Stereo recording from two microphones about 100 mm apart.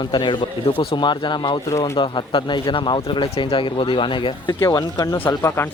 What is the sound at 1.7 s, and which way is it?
Speech, 30° left (ahead or behind).